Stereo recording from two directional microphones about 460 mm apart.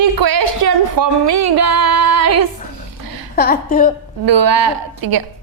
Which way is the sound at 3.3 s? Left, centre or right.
Centre.